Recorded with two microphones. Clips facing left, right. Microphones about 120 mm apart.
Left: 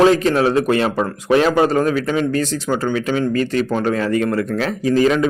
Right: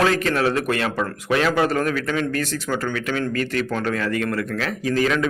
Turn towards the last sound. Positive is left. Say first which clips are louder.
# left 6 dB
turn(degrees=30)  # may be behind; listen again after turning